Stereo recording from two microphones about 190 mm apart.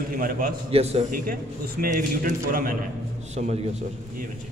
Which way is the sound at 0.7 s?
35° right (ahead or behind).